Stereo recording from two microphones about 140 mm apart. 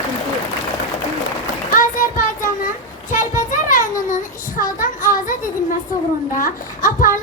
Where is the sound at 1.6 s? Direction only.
70° left (ahead or behind).